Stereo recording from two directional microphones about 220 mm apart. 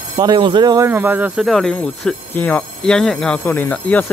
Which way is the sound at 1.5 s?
5° left (ahead or behind).